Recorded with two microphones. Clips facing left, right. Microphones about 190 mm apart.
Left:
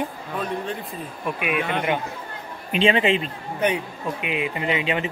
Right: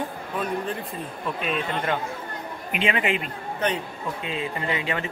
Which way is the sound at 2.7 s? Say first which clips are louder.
Left 6 dB; 30° left (ahead or behind).